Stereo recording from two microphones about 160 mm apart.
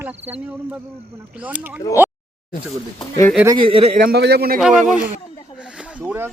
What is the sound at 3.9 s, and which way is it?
Speech, 80° right.